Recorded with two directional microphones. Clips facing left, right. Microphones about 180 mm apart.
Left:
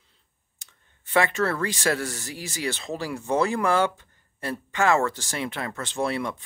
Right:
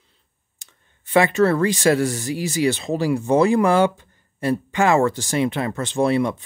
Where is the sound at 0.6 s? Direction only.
20° right (ahead or behind).